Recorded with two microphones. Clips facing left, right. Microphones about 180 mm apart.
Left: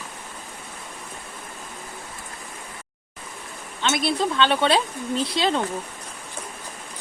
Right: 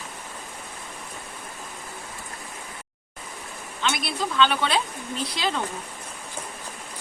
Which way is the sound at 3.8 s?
25° left (ahead or behind).